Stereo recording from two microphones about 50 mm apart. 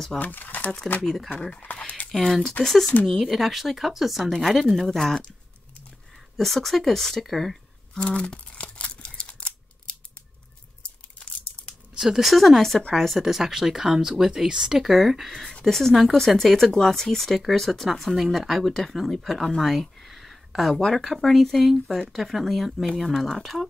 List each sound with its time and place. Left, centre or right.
0.2 s speech: left
1.0 s speech: centre
1.5 s speech: left
1.8 s squish: left
2.1 s speech: centre
6.3 s speech: centre
8.1 s camera: left
12.0 s speech: centre
12.3 s speech: centre